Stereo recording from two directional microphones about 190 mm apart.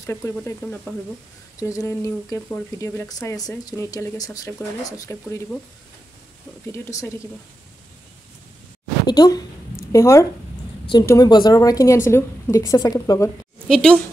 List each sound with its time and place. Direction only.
0.0 s speech: 15° left (ahead or behind)
6.7 s speech: 15° left (ahead or behind)
9.0 s a woman's voice: 20° left (ahead or behind)
13.7 s a woman's voice: 5° left (ahead or behind)